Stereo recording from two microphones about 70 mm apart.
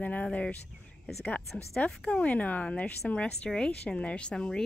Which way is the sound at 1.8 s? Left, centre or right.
Centre.